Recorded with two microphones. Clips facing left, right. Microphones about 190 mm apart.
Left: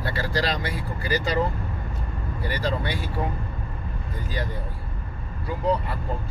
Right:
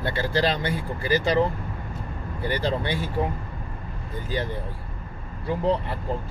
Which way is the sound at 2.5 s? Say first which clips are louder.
Right 2 dB; 25° right (ahead or behind).